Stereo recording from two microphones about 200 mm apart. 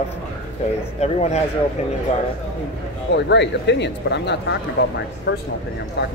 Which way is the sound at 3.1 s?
60° left (ahead or behind).